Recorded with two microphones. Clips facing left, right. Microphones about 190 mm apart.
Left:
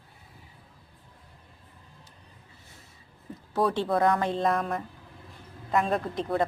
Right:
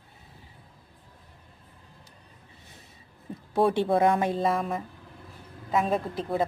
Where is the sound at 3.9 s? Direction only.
20° right (ahead or behind).